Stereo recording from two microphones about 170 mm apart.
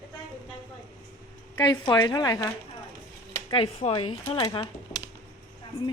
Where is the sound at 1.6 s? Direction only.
25° left (ahead or behind).